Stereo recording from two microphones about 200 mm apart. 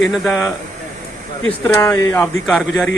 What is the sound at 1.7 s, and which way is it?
Speech, 10° left (ahead or behind).